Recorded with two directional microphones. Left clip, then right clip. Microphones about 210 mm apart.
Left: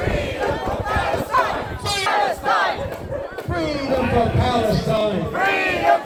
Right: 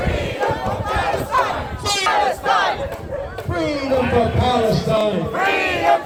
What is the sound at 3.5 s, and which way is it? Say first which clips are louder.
Chatter: right 2 dB; 55° right (ahead or behind).